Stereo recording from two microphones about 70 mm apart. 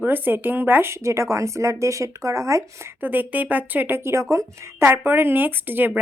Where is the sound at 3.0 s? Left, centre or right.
Right.